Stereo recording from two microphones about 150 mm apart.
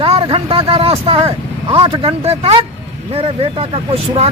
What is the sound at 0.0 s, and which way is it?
Speech, 40° right (ahead or behind).